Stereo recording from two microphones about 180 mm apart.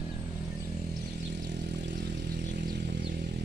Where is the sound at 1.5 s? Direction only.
75° right (ahead or behind).